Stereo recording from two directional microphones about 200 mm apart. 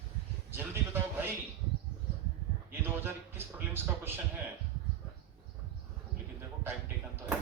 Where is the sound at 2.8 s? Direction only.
10° right (ahead or behind).